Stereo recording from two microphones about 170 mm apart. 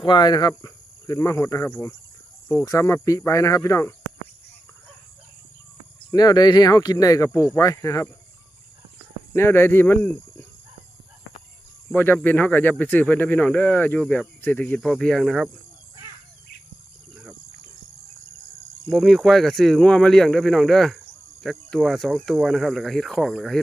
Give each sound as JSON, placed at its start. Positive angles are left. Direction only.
{"t": 0.0, "sound": "speech", "side_deg": 25}
{"t": 6.1, "sound": "speech", "side_deg": 25}
{"t": 9.3, "sound": "speech", "side_deg": 15}
{"t": 11.9, "sound": "speech", "side_deg": 10}
{"t": 18.9, "sound": "speech", "side_deg": 0}